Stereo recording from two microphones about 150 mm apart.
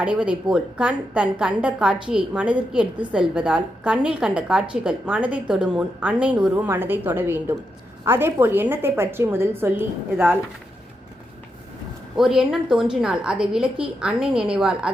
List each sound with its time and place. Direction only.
0.0 s a woman's voice: 10° right (ahead or behind)
12.1 s a woman's voice: 5° right (ahead or behind)